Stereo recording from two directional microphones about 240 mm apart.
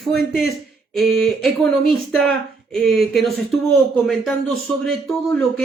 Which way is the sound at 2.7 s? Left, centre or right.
Centre.